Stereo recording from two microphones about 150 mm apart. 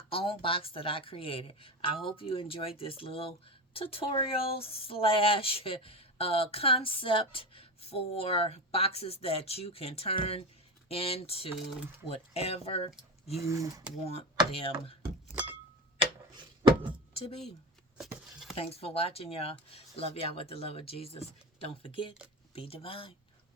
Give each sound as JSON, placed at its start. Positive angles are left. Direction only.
{"t": 0.1, "sound": "speech", "side_deg": 40}
{"t": 13.5, "sound": "speech", "side_deg": -20}
{"t": 14.5, "sound": "speech", "side_deg": 40}
{"t": 15.3, "sound": "a sound", "side_deg": -10}
{"t": 16.0, "sound": "a sound", "side_deg": -35}
{"t": 18.5, "sound": "speech", "side_deg": 40}